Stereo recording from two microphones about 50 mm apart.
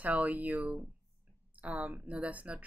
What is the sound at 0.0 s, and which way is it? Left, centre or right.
Speech, right.